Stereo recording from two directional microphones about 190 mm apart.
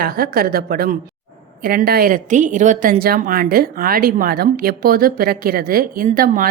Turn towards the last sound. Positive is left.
turn(degrees=-50)  # may be behind; listen again after turning